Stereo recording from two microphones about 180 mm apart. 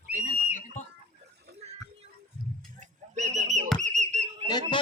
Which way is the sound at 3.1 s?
40° right (ahead or behind).